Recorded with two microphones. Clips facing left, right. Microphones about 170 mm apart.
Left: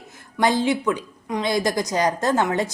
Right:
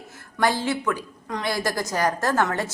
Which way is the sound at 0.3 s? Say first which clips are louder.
Left 3 dB; 20° left (ahead or behind).